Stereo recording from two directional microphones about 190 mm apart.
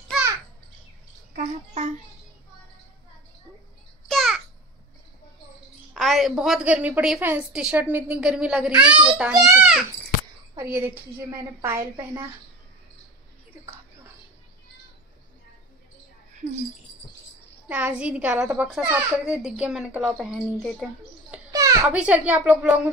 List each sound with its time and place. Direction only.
1.3 s a sound: 40° right (ahead or behind)
4.1 s babbling: centre (ahead or behind)
5.9 s a woman's voice: centre (ahead or behind)
9.3 s a woman's voice: 20° right (ahead or behind)
9.6 s a woman's voice: 5° right (ahead or behind)
17.6 s a woman's voice: 10° right (ahead or behind)
21.5 s a sound: 20° right (ahead or behind)
21.8 s a woman's voice: 5° right (ahead or behind)